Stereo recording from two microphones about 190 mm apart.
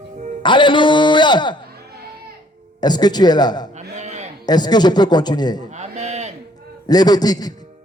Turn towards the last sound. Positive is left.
turn(degrees=20)  # may be behind; listen again after turning